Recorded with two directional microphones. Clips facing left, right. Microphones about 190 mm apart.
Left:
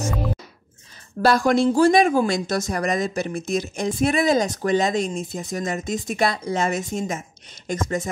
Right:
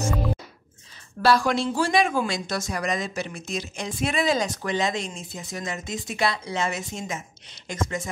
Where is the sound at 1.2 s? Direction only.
45° left (ahead or behind).